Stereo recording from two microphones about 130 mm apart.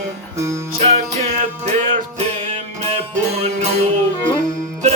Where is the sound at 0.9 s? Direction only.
60° right (ahead or behind).